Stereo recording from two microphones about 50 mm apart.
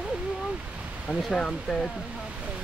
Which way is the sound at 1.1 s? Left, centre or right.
Left.